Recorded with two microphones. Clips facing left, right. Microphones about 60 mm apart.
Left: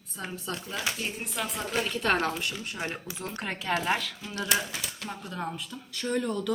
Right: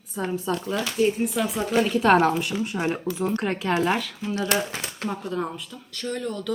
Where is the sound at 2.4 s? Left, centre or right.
Centre.